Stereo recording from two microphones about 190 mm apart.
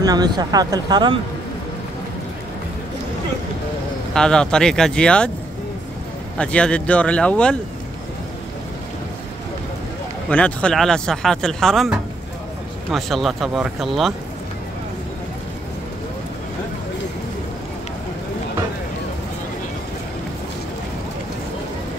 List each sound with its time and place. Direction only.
0.0 s speech: 20° right (ahead or behind)
4.1 s speech: 5° left (ahead or behind)
6.3 s speech: 5° left (ahead or behind)
10.3 s speech: 5° left (ahead or behind)